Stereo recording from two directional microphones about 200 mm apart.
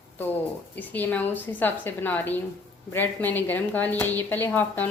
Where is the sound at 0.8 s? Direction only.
10° left (ahead or behind).